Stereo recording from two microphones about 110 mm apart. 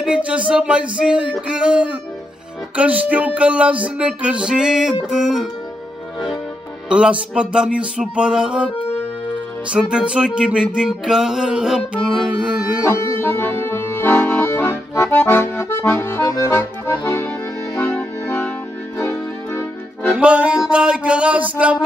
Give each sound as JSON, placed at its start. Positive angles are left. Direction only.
{"t": 0.0, "sound": "music", "side_deg": -10}
{"t": 6.9, "sound": "music", "side_deg": -10}
{"t": 9.7, "sound": "music", "side_deg": -10}
{"t": 13.2, "sound": "accordion", "side_deg": 20}
{"t": 19.5, "sound": "accordion", "side_deg": 20}
{"t": 20.2, "sound": "music", "side_deg": -10}